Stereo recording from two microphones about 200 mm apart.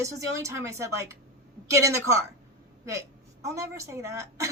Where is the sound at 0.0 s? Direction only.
15° right (ahead or behind).